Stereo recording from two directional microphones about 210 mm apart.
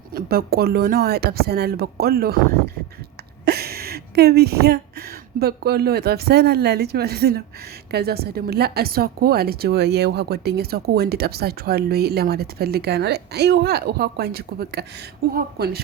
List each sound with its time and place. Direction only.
0.1 s a woman's voice: 45° right (ahead or behind)